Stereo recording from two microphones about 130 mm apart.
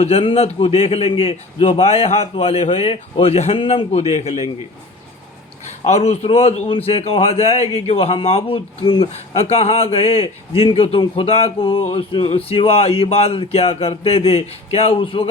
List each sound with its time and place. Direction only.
0.0 s speech: 50° left (ahead or behind)
5.8 s speech: 55° left (ahead or behind)